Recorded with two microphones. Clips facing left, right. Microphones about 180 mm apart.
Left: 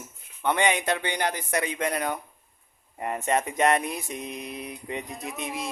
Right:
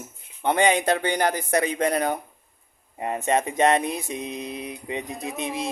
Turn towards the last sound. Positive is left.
turn(degrees=-25)  # may be behind; listen again after turning